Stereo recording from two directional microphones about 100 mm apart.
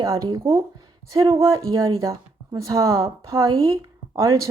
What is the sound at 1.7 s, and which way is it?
Speech, 35° right (ahead or behind).